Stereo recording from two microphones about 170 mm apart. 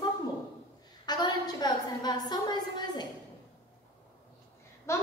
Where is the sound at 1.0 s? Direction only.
25° left (ahead or behind).